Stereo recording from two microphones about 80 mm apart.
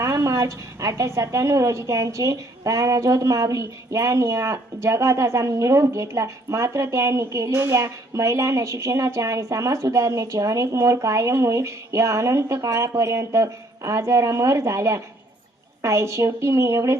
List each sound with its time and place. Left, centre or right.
0.0 s a woman's voice: right